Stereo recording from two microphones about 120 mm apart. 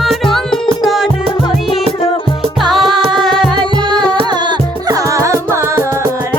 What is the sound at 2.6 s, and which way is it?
Music, centre (ahead or behind).